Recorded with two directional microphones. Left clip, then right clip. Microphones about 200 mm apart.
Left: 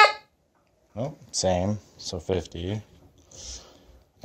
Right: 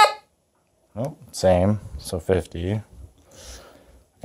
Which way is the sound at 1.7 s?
35° right (ahead or behind).